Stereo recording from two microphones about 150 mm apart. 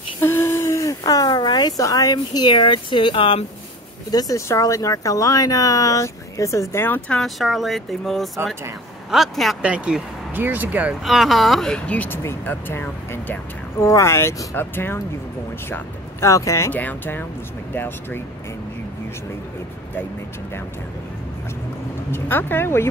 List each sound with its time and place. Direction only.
0.2 s a woman's voice: 15° left (ahead or behind); by 3.4 s 35° left (ahead or behind)
4.1 s a woman's voice: 25° left (ahead or behind)
7.2 s speech: centre (ahead or behind)
22.1 s speech: 15° left (ahead or behind)